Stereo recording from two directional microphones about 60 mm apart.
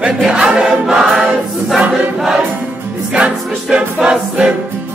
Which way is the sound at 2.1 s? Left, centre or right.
Centre.